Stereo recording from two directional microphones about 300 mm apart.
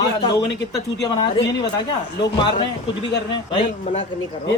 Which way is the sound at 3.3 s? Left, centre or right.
Centre.